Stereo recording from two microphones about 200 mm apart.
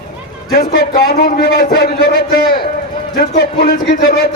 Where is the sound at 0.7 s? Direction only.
50° left (ahead or behind).